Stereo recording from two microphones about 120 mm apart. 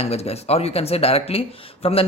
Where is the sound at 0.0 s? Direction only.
60° left (ahead or behind).